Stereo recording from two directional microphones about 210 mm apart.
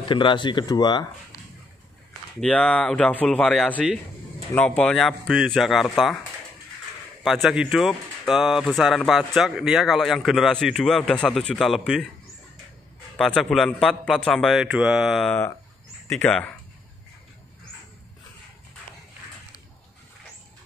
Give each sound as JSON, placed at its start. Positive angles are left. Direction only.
{"t": 0.1, "sound": "speech", "side_deg": 25}
{"t": 2.4, "sound": "speech", "side_deg": 5}
{"t": 7.2, "sound": "speech", "side_deg": 0}
{"t": 13.2, "sound": "speech", "side_deg": 0}